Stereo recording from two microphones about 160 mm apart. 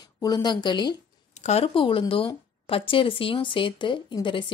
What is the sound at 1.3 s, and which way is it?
A woman's voice, 45° left (ahead or behind).